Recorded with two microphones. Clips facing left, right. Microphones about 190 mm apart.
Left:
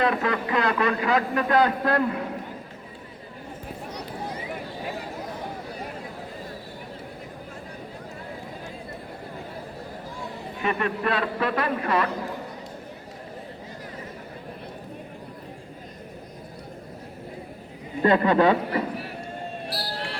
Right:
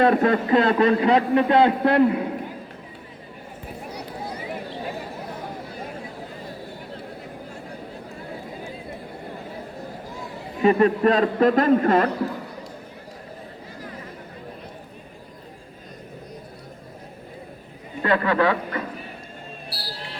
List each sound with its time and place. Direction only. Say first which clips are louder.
0.0 s a man's voice: right 6 dB; 35° right (ahead or behind)
10.6 s a man's voice: right 9 dB; 35° right (ahead or behind)
18.0 s speech: left 2 dB; 25° left (ahead or behind)
19.6 s basketball bounce: left 3 dB; 75° left (ahead or behind)